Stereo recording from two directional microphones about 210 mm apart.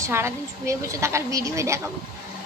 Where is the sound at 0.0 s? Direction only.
10° right (ahead or behind).